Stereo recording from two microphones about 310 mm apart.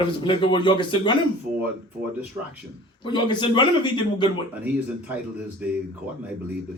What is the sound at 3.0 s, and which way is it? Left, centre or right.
Speech, centre.